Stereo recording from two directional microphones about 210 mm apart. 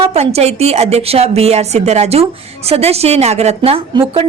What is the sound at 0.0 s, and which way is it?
A woman's voice, 30° right (ahead or behind).